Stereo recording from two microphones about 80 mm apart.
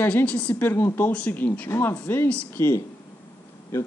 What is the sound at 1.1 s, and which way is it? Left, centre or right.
Speech, centre.